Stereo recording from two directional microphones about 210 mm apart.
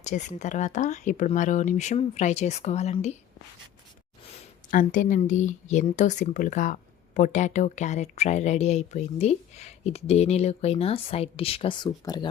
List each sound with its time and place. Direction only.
0.0 s speech: 35° left (ahead or behind)
4.7 s speech: 40° left (ahead or behind); by 12.3 s 20° left (ahead or behind)